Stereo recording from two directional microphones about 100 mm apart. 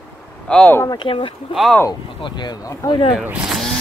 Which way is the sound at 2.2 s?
45° left (ahead or behind).